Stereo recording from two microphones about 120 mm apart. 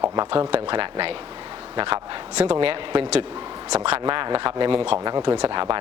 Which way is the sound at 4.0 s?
40° right (ahead or behind).